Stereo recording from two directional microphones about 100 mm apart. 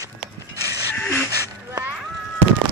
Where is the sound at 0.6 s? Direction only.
35° right (ahead or behind).